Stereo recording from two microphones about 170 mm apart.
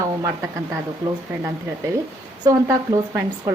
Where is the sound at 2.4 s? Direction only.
20° right (ahead or behind).